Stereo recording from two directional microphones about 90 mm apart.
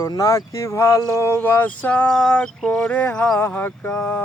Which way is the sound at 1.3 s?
20° left (ahead or behind).